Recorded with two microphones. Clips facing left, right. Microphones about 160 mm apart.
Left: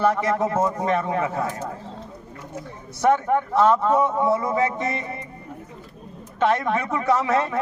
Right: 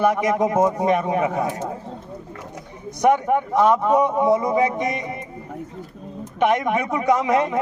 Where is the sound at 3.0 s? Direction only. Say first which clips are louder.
Right 2 dB; 15° right (ahead or behind).